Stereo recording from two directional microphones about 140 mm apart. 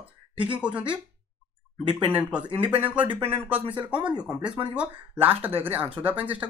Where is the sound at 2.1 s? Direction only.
10° right (ahead or behind).